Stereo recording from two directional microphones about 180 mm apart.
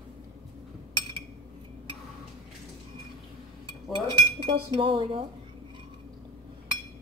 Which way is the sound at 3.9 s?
25° right (ahead or behind).